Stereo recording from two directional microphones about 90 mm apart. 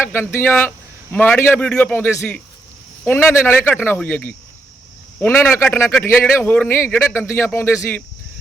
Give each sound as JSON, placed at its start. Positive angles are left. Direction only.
{"t": 0.0, "sound": "a man's voice", "side_deg": 25}